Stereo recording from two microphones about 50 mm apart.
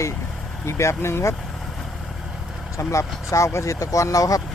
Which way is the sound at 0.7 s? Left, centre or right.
Left.